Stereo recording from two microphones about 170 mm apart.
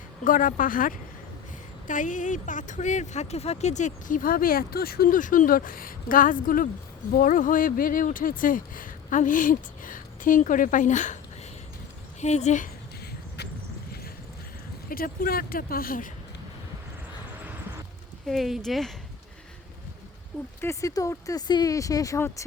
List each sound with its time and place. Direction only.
0.3 s speech: 50° left (ahead or behind)
12.2 s speech: 40° left (ahead or behind)
14.8 s speech: 60° left (ahead or behind)
18.3 s speech: centre (ahead or behind)
20.6 s speech: 20° left (ahead or behind)